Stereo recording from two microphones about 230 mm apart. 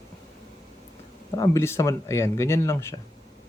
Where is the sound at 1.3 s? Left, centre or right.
Centre.